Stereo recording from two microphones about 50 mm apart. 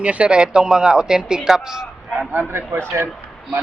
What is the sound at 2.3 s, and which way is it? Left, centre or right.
Speech, right.